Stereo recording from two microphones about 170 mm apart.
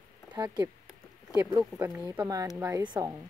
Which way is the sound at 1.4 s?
15° right (ahead or behind).